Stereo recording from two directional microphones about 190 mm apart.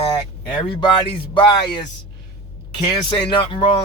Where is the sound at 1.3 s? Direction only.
25° left (ahead or behind).